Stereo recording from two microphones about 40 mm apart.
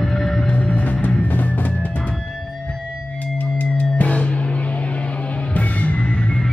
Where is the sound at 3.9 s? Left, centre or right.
Left.